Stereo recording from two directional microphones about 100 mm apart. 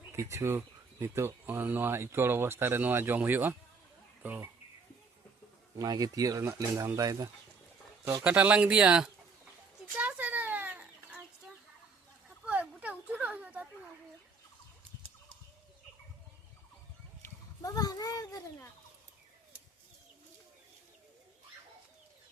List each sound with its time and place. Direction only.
0.2 s speech: 30° right (ahead or behind)
5.7 s speech: 40° right (ahead or behind)
8.2 s speech: 15° right (ahead or behind)
10.0 s chicken: 15° right (ahead or behind)
12.5 s a sound: 15° right (ahead or behind)
17.6 s a sound: 40° left (ahead or behind)